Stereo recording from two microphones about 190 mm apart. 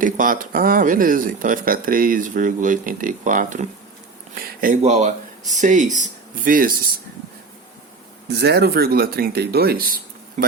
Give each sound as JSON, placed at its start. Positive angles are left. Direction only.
{"t": 0.0, "sound": "speech", "side_deg": -45}
{"t": 8.3, "sound": "speech", "side_deg": -60}
{"t": 10.4, "sound": "speech", "side_deg": -40}